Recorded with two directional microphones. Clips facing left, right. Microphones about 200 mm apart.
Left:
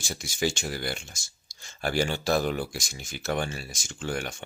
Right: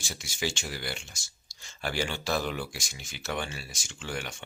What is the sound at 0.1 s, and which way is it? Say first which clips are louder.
Speech: left 5 dB; 45° left (ahead or behind).